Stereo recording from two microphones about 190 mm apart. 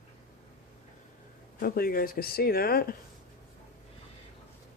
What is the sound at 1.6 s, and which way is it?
Speech, 50° left (ahead or behind).